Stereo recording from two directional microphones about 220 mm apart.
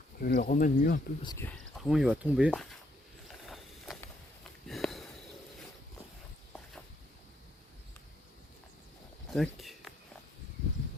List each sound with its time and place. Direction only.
0.2 s speech: 45° left (ahead or behind)
1.2 s speech: 20° left (ahead or behind)
1.8 s speech: centre (ahead or behind)
3.2 s a sound: centre (ahead or behind)
4.7 s sniff: centre (ahead or behind)
9.3 s a sound: centre (ahead or behind)